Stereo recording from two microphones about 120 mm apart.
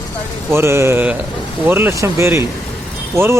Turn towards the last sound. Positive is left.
turn(degrees=-20)  # may be behind; listen again after turning